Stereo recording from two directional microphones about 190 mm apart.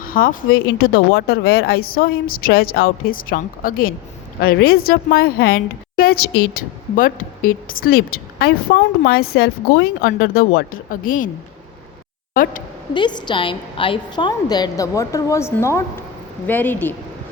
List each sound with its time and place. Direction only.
0.0 s a woman's voice: 50° left (ahead or behind)
12.3 s a woman's voice: 45° left (ahead or behind)
12.9 s a woman's voice: 25° left (ahead or behind)